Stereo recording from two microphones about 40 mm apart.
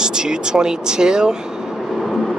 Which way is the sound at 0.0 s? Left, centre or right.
Centre.